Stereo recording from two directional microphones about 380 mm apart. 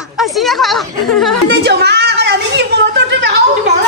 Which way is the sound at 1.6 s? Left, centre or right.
Right.